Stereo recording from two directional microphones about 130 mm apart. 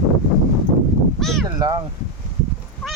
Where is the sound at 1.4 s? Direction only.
30° right (ahead or behind).